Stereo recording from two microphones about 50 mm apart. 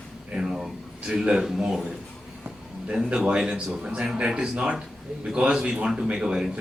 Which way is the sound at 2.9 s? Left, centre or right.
Centre.